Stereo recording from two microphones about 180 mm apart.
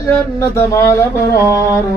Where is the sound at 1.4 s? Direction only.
15° right (ahead or behind).